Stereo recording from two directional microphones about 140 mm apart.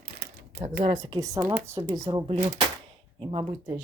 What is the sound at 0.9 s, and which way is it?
Speech, 30° right (ahead or behind).